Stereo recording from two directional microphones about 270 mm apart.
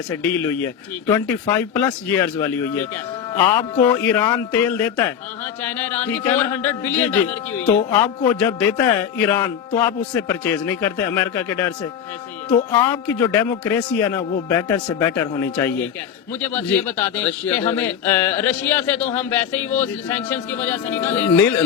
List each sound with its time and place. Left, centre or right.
1.1 s speech: centre